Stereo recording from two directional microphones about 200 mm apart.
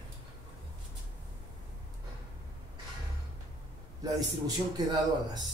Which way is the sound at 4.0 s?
20° right (ahead or behind).